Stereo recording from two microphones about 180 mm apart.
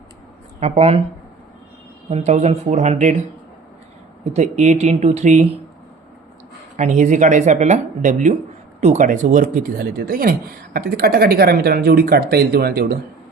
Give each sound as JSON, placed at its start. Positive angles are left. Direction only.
{"t": 0.6, "sound": "speech", "side_deg": -35}
{"t": 2.0, "sound": "speech", "side_deg": -35}
{"t": 4.2, "sound": "speech", "side_deg": -35}
{"t": 6.7, "sound": "speech", "side_deg": -45}